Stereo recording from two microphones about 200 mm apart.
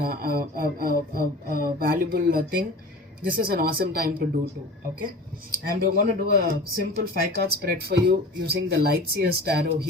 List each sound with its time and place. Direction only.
0.0 s speech: 50° right (ahead or behind)